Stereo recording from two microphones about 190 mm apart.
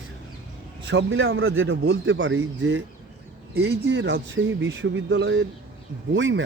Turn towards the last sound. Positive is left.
turn(degrees=-80)